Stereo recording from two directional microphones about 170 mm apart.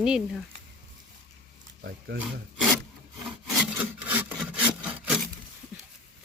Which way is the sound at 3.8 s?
10° right (ahead or behind).